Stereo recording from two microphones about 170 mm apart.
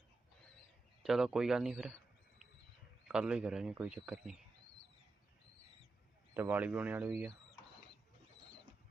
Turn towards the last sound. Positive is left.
turn(degrees=-10)  # may be behind; listen again after turning